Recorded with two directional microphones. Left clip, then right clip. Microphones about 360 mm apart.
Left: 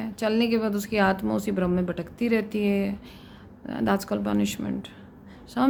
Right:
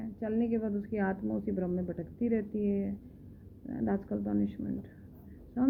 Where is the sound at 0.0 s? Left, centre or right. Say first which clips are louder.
Left 9 dB; centre.